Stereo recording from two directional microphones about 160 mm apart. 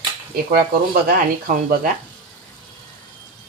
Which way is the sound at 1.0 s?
65° right (ahead or behind).